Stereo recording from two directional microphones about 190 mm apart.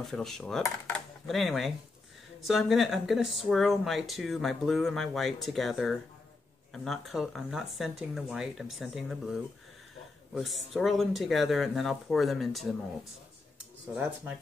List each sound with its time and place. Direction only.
0.0 s speech: centre (ahead or behind)
0.6 s speech: 15° left (ahead or behind)
0.9 s speech: centre (ahead or behind)
10.3 s speech: centre (ahead or behind)